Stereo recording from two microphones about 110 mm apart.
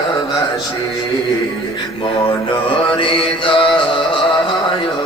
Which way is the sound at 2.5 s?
50° left (ahead or behind).